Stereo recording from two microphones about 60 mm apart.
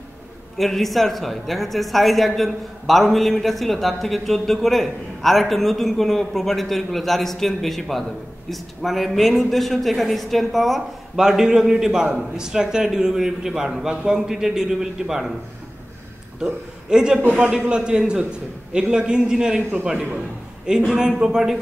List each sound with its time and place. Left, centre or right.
0.6 s speech: centre
16.9 s a man's voice: centre